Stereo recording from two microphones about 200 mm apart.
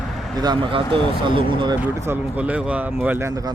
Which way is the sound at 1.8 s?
10° right (ahead or behind).